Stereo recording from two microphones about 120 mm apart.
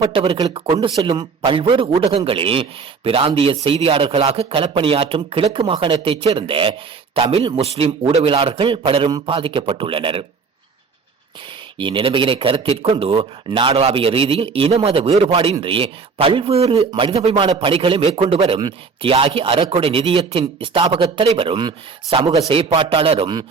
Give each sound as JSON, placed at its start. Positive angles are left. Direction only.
{"t": 0.1, "sound": "a man's voice", "side_deg": -50}
{"t": 1.5, "sound": "speech", "side_deg": -45}
{"t": 4.6, "sound": "a man's voice", "side_deg": -45}
{"t": 11.8, "sound": "a man's voice", "side_deg": -45}
{"t": 15.6, "sound": "a man's voice", "side_deg": -50}